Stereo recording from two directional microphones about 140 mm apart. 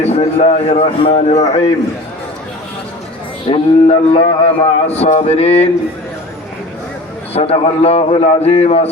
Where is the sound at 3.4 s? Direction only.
40° left (ahead or behind).